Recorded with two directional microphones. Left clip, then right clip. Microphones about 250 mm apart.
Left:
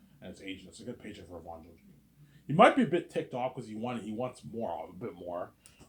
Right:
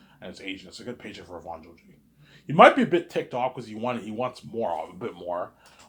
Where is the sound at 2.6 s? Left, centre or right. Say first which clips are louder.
Right 7 dB; centre.